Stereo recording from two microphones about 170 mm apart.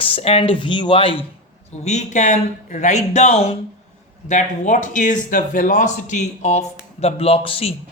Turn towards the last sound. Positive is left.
turn(degrees=35)  # may be behind; listen again after turning